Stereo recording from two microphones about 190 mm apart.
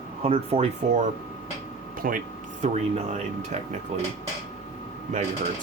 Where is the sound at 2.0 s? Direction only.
50° right (ahead or behind).